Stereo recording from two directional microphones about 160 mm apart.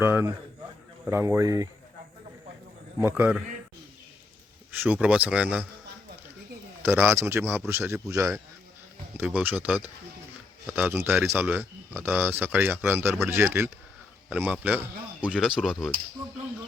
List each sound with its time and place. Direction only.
0.0 s speech: 15° right (ahead or behind)
3.0 s speech: 10° right (ahead or behind)
4.7 s speech: 10° right (ahead or behind)
6.8 s speech: 10° right (ahead or behind)